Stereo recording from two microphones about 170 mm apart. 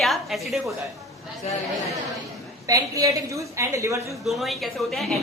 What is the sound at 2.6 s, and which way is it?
A woman's voice, 20° right (ahead or behind).